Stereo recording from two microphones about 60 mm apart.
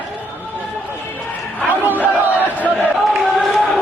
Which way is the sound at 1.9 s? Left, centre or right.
Right.